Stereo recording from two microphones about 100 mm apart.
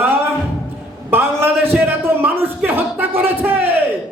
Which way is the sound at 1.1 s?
20° right (ahead or behind).